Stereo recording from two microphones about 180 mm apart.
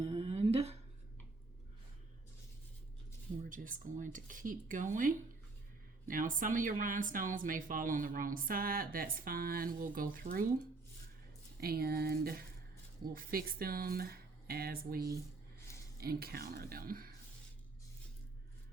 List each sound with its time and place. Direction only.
0.0 s a sound: 35° right (ahead or behind)
3.5 s speech: 45° right (ahead or behind)
11.6 s speech: 60° right (ahead or behind)